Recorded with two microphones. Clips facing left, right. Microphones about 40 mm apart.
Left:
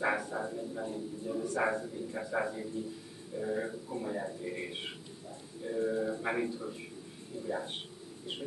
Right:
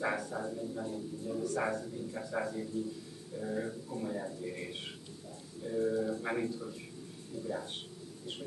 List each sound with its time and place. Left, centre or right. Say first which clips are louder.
0.0 s a man's voice: left 2 dB; centre